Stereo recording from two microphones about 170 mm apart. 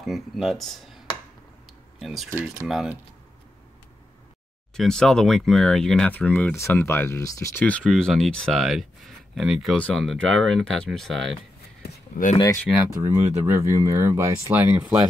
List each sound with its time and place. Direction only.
0.0 s speech: centre (ahead or behind)
2.0 s speech: centre (ahead or behind)
4.7 s speech: centre (ahead or behind)
7.8 s speech: centre (ahead or behind)
11.8 s a sound: 50° left (ahead or behind)
12.7 s speech: 15° right (ahead or behind)